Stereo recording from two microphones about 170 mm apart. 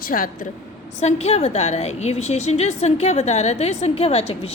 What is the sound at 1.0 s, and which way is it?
A woman's voice, 40° left (ahead or behind).